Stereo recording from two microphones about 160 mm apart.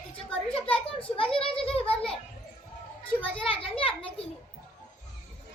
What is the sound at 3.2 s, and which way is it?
Children playing, 35° left (ahead or behind).